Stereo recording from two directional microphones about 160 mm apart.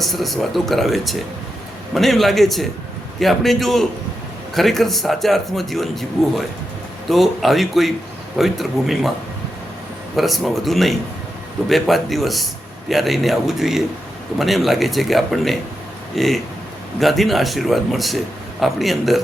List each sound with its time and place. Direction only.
0.0 s a man's voice: centre (ahead or behind)
10.2 s a man's voice: centre (ahead or behind)